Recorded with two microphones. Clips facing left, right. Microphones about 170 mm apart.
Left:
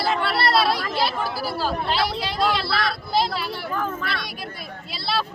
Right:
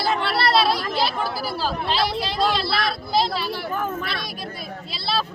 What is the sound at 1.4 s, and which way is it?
Speech, centre (ahead or behind).